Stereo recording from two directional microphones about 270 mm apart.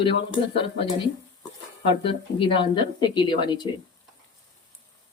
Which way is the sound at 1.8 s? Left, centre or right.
Centre.